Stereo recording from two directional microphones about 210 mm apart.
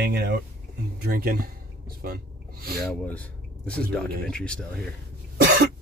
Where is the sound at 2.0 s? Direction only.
45° right (ahead or behind).